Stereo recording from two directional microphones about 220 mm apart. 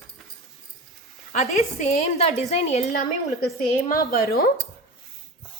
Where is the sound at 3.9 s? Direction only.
40° left (ahead or behind).